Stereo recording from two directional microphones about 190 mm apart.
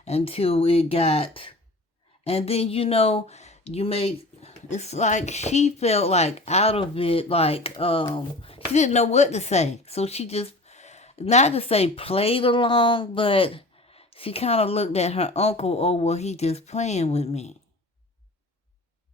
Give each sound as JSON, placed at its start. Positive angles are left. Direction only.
{"t": 0.0, "sound": "a woman's voice", "side_deg": 30}